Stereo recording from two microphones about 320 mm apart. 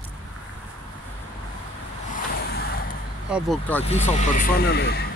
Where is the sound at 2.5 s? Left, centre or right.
Left.